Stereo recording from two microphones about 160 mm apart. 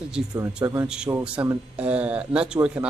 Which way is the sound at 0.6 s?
15° right (ahead or behind).